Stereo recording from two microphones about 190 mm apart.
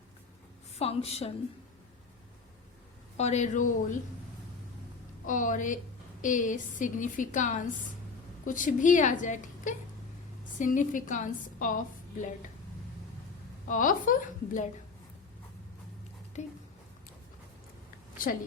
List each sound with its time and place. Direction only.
0.8 s a woman's voice: 30° left (ahead or behind)
3.2 s a woman's voice: 35° left (ahead or behind)
5.2 s a woman's voice: 45° left (ahead or behind)
13.7 s a woman's voice: 45° left (ahead or behind)
16.4 s a woman's voice: 40° left (ahead or behind)